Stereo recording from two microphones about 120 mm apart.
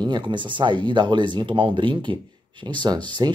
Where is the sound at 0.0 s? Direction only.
40° right (ahead or behind).